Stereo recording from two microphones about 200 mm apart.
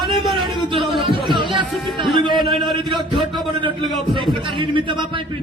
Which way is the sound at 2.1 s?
25° right (ahead or behind).